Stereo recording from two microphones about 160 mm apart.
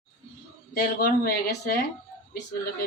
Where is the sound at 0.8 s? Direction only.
70° left (ahead or behind).